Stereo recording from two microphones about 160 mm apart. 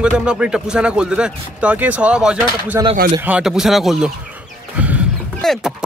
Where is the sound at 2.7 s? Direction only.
20° right (ahead or behind).